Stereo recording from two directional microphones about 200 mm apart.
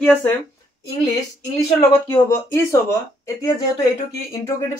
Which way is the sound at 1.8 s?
10° left (ahead or behind).